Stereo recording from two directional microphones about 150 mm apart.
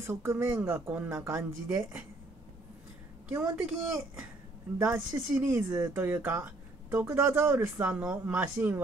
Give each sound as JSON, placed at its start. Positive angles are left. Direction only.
{"t": 0.0, "sound": "speech", "side_deg": -15}
{"t": 3.3, "sound": "speech", "side_deg": -10}
{"t": 4.7, "sound": "speech", "side_deg": -10}